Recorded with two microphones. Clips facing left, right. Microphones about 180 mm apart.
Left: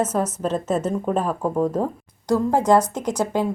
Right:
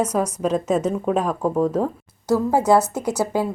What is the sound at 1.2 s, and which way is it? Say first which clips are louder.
Speech: right 1 dB; 10° left (ahead or behind).